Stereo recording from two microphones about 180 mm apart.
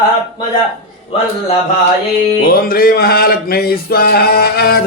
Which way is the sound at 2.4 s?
55° left (ahead or behind).